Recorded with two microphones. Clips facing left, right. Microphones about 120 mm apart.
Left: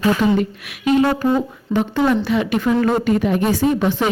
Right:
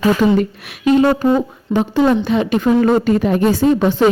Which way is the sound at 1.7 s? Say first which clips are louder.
Right 2 dB; centre (ahead or behind).